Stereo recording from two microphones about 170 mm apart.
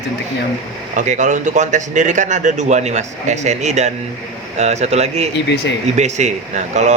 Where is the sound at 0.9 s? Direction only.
45° right (ahead or behind).